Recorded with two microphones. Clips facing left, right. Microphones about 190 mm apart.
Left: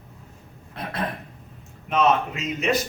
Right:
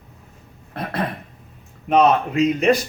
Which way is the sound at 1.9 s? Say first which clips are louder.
Right 5 dB; 35° right (ahead or behind).